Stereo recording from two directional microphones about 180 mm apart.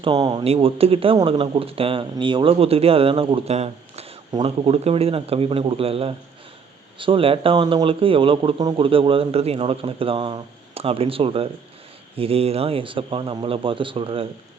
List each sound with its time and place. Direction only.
0.0 s a man's voice: 25° right (ahead or behind)